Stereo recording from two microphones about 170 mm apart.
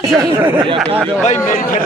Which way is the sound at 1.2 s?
45° left (ahead or behind).